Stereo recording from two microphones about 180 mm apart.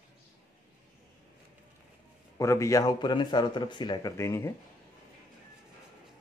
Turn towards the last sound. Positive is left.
turn(degrees=15)  # may be behind; listen again after turning